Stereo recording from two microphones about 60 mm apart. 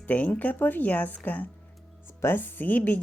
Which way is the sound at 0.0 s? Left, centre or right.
Left.